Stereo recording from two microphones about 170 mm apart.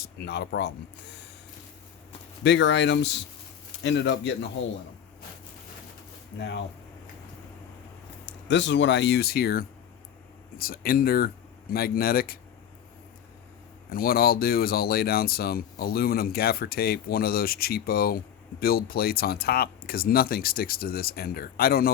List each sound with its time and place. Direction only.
0.0 s speech: 75° left (ahead or behind)
2.4 s speech: 90° left
8.4 s speech: 90° left; by 12.4 s 60° left (ahead or behind)
13.9 s speech: 60° left (ahead or behind)